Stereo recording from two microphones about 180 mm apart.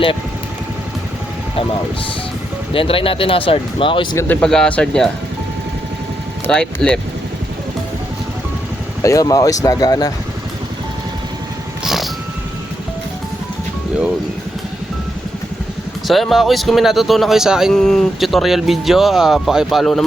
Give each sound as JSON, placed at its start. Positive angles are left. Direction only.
{"t": 2.7, "sound": "speech", "side_deg": 30}
{"t": 4.2, "sound": "speech", "side_deg": 5}
{"t": 6.5, "sound": "speech", "side_deg": 5}
{"t": 9.0, "sound": "speech", "side_deg": 20}
{"t": 11.8, "sound": "music", "side_deg": 0}
{"t": 16.0, "sound": "speech", "side_deg": 0}